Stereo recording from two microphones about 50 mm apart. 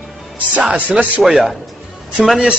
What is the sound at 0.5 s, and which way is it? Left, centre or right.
Speech, right.